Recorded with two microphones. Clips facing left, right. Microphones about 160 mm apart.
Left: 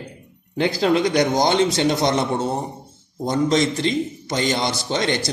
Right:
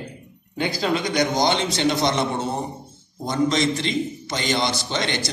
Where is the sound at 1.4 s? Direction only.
40° left (ahead or behind).